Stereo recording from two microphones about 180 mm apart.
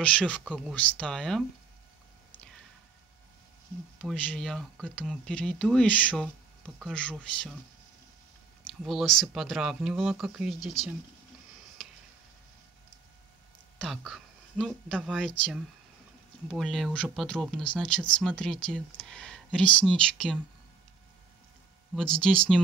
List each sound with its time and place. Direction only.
0.0 s speech: 5° left (ahead or behind)
4.0 s speech: 5° left (ahead or behind)
8.8 s speech: centre (ahead or behind)
13.7 s speech: centre (ahead or behind)
21.9 s speech: 5° left (ahead or behind)